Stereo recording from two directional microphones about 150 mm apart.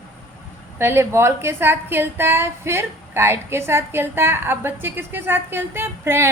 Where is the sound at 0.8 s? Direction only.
15° right (ahead or behind).